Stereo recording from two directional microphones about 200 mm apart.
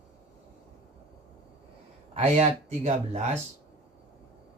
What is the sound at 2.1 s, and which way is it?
Speech, 35° right (ahead or behind).